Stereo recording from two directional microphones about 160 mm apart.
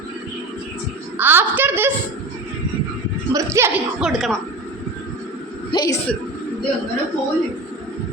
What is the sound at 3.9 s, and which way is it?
Speech, centre (ahead or behind).